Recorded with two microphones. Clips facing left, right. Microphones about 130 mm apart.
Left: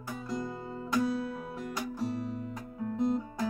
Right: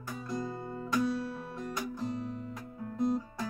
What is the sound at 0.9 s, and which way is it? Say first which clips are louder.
Music: left 1 dB; 10° left (ahead or behind).